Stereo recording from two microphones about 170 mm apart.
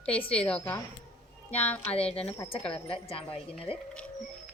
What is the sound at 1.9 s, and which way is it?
Speech, 35° left (ahead or behind).